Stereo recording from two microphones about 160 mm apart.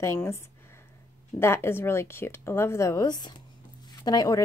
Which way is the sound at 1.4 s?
15° left (ahead or behind).